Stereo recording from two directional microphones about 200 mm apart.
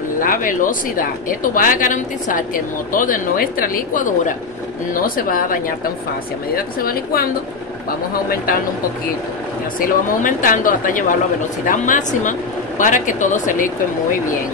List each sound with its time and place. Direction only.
0.2 s a woman's voice: 45° left (ahead or behind)
9.8 s a woman's voice: 40° left (ahead or behind)